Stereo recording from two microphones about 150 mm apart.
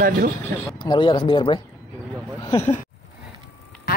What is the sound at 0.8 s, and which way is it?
Speech, 30° left (ahead or behind).